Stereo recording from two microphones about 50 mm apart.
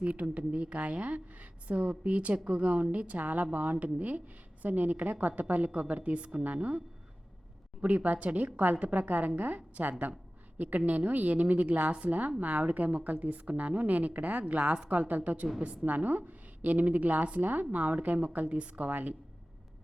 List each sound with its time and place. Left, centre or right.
0.0 s a woman's voice: right